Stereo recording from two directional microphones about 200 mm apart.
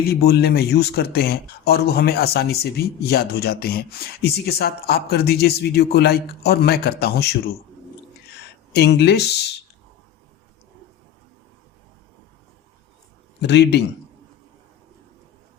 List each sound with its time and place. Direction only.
0.1 s speech: 50° left (ahead or behind)
8.7 s speech: 55° left (ahead or behind)
13.4 s speech: 55° left (ahead or behind)